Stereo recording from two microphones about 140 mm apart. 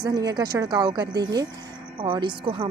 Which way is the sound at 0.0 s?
30° right (ahead or behind).